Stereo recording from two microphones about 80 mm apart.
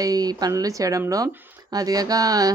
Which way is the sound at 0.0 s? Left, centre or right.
Right.